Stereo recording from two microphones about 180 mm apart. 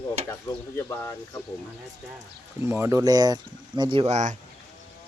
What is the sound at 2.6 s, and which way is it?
Speech, 15° right (ahead or behind).